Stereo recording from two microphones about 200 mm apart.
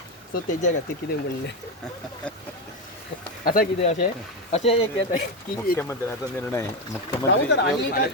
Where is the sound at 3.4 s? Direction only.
45° left (ahead or behind); by 4.9 s 30° left (ahead or behind).